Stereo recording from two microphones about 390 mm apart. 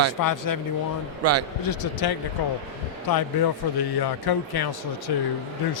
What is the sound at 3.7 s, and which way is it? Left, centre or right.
Speech, left.